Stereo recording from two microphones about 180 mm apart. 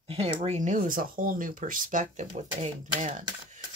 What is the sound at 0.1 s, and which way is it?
Speech, 35° right (ahead or behind).